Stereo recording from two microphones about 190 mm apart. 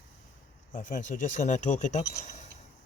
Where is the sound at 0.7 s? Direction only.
45° left (ahead or behind).